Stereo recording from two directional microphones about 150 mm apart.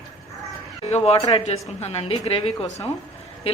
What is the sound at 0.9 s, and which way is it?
A man's voice, 45° left (ahead or behind).